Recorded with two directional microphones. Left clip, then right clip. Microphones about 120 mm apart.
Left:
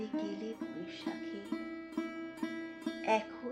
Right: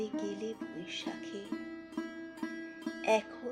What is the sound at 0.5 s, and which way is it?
Music, 15° right (ahead or behind).